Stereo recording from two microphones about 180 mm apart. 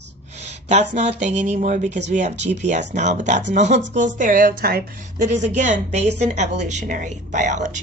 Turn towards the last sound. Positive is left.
turn(degrees=-40)  # may be behind; listen again after turning